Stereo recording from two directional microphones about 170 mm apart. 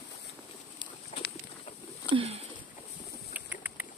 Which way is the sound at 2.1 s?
35° right (ahead or behind).